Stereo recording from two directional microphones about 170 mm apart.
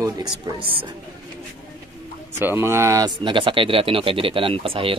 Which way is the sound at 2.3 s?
15° right (ahead or behind).